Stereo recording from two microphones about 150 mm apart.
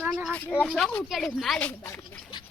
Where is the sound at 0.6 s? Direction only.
5° left (ahead or behind).